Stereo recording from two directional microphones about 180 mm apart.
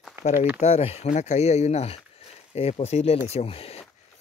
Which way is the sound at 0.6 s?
35° left (ahead or behind).